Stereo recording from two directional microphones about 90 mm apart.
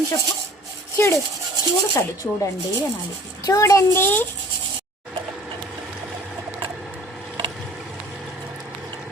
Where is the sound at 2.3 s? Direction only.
25° left (ahead or behind).